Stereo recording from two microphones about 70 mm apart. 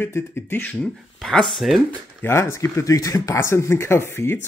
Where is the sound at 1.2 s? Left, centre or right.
Centre.